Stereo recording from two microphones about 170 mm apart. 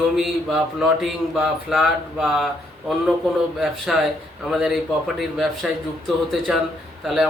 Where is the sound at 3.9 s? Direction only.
Centre (ahead or behind).